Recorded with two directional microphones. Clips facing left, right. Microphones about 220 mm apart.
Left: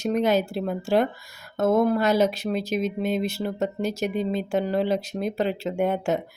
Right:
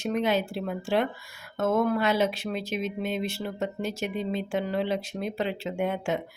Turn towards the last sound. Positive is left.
turn(degrees=40)  # may be behind; listen again after turning